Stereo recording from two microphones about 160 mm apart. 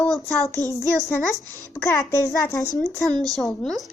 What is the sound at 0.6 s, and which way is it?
A child's voice, 15° left (ahead or behind).